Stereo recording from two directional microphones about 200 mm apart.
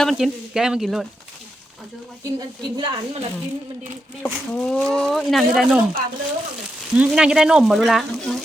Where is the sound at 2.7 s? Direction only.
20° right (ahead or behind).